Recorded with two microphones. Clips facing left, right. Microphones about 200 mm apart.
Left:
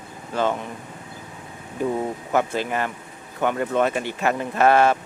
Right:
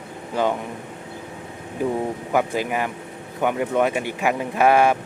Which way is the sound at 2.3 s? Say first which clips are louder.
Right 1 dB; 10° right (ahead or behind).